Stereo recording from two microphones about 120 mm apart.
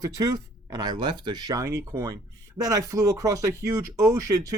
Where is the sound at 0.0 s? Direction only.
30° right (ahead or behind).